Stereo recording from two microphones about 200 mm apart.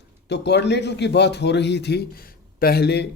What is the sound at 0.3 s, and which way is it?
A man's voice, 60° left (ahead or behind).